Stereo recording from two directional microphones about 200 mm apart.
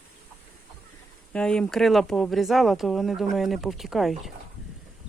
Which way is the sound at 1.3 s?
5° left (ahead or behind).